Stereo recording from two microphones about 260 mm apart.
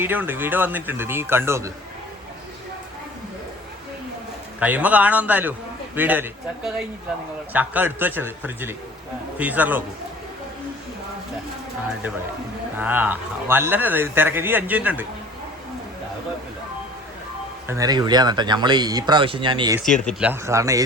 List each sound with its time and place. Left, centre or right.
0.0 s speech: centre
4.6 s a man's voice: centre
12.7 s speech: centre
17.7 s speech: centre
19.8 s speech: centre